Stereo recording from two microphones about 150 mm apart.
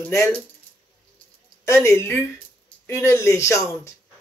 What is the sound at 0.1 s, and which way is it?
Speech, 20° left (ahead or behind).